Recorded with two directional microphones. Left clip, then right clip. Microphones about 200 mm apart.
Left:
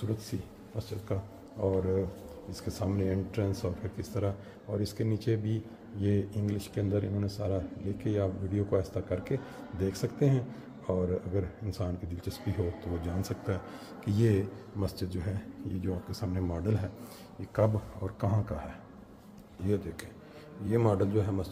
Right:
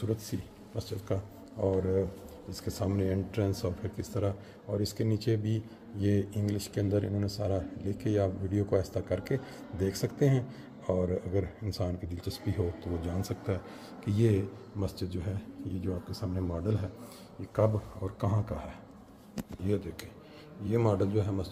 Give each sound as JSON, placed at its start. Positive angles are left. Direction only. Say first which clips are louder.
{"t": 0.7, "sound": "speech", "louder": "right 2 dB", "side_deg": -25}
{"t": 17.6, "sound": "speech", "louder": "even", "side_deg": -10}
{"t": 20.6, "sound": "speech", "louder": "left 1 dB", "side_deg": 0}